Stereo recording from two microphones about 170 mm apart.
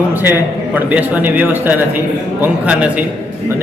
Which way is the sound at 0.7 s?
10° right (ahead or behind).